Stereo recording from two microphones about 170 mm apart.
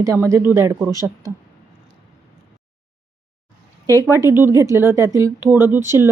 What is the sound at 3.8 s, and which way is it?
Speech, 20° right (ahead or behind).